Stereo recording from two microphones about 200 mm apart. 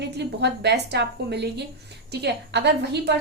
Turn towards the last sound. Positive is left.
turn(degrees=-55)  # may be behind; listen again after turning